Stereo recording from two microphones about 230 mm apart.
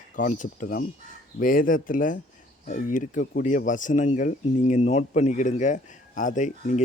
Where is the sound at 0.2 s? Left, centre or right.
Left.